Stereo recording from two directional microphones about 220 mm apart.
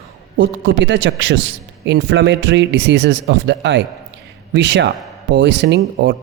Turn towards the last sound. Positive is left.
turn(degrees=-50)  # may be behind; listen again after turning